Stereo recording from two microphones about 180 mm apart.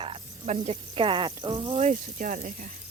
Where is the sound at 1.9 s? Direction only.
45° right (ahead or behind).